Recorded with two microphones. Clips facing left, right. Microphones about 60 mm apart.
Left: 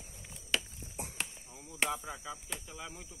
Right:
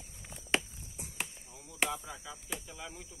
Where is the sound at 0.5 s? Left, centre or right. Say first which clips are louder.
Right 3 dB; right.